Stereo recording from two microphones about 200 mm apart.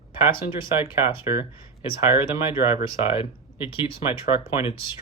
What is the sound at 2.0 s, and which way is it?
Speech, 10° right (ahead or behind).